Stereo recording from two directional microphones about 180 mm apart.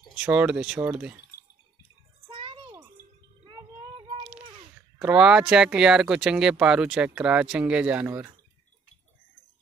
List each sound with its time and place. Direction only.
0.2 s speech: 10° right (ahead or behind)
2.2 s music: 30° right (ahead or behind)
3.4 s vehicle: 30° right (ahead or behind)
4.9 s speech: 5° right (ahead or behind)